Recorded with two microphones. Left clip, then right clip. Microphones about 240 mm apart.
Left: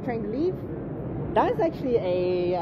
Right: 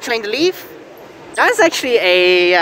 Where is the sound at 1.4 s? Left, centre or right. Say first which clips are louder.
Right 13 dB; right.